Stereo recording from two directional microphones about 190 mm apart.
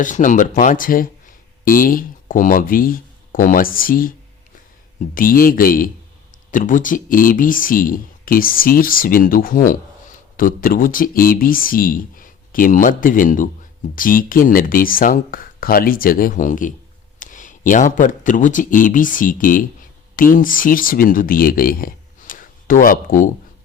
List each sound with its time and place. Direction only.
0.0 s speech: 40° left (ahead or behind)